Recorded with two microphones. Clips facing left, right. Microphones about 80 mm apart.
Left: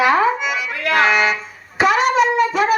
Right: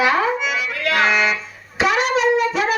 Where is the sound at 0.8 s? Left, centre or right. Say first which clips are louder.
Left 3 dB; centre.